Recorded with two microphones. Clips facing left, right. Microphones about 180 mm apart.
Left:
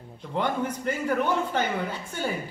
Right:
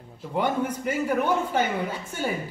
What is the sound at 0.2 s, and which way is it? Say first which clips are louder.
A man's voice: right 2 dB; 10° right (ahead or behind).